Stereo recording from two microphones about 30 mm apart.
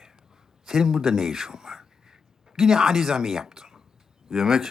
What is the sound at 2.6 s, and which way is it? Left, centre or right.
A woman's voice, centre.